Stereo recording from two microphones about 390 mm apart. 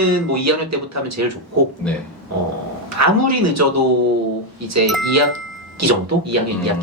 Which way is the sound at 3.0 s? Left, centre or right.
Right.